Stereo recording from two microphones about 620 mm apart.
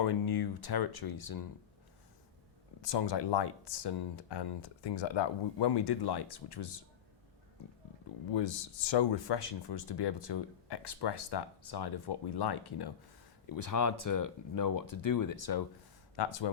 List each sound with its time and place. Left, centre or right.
0.0 s speech: left
2.8 s speech: left
8.3 s speech: left